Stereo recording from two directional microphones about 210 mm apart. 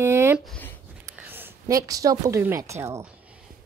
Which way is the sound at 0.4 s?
5° left (ahead or behind).